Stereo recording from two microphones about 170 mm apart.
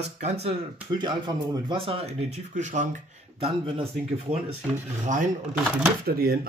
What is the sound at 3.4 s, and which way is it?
Speech, 35° right (ahead or behind).